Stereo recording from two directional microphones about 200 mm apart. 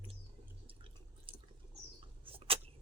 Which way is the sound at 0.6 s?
25° right (ahead or behind).